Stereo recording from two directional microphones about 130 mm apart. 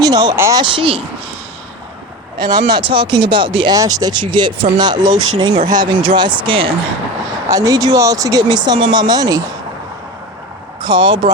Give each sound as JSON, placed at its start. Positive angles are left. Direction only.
{"t": 0.0, "sound": "speech", "side_deg": -30}
{"t": 0.6, "sound": "speech", "side_deg": -40}
{"t": 2.4, "sound": "speech", "side_deg": -35}
{"t": 3.8, "sound": "speech", "side_deg": -30}
{"t": 7.4, "sound": "speech", "side_deg": -25}
{"t": 10.8, "sound": "speech", "side_deg": -35}